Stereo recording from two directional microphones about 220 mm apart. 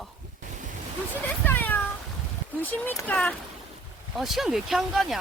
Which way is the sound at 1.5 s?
10° left (ahead or behind).